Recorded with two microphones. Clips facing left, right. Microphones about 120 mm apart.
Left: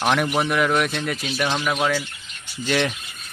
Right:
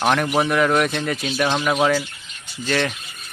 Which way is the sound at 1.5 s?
15° right (ahead or behind).